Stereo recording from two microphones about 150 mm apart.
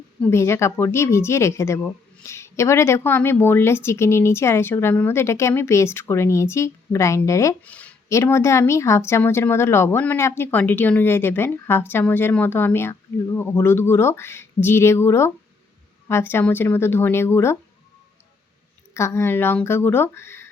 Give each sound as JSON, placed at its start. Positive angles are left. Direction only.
{"t": 0.2, "sound": "speech", "side_deg": 15}
{"t": 7.6, "sound": "speech", "side_deg": 10}
{"t": 18.9, "sound": "speech", "side_deg": 20}